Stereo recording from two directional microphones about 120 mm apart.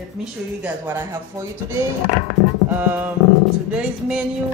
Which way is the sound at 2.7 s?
15° right (ahead or behind).